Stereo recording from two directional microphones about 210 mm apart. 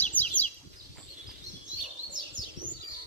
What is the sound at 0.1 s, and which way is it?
Bird, 5° left (ahead or behind).